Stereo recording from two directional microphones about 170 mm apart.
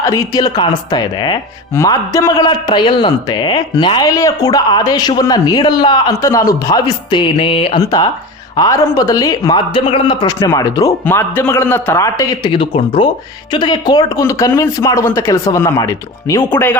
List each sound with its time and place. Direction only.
0.0 s speech: 20° left (ahead or behind)
7.8 s a man's voice: 20° left (ahead or behind)